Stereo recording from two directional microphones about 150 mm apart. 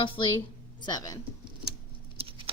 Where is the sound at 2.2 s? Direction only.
40° right (ahead or behind).